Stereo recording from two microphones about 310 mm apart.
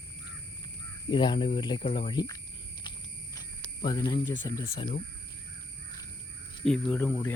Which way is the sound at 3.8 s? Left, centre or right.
Centre.